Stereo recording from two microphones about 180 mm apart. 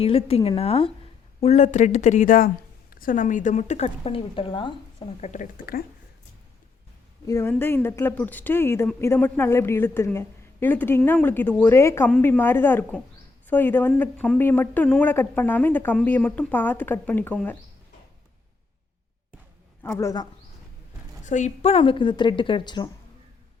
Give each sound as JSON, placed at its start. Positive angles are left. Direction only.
{"t": 0.0, "sound": "a woman's voice", "side_deg": 30}
{"t": 7.3, "sound": "a woman's voice", "side_deg": 15}
{"t": 19.8, "sound": "a woman's voice", "side_deg": 15}
{"t": 21.2, "sound": "a woman's voice", "side_deg": 40}